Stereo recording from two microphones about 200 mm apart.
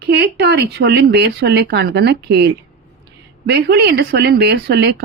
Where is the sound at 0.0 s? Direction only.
55° right (ahead or behind).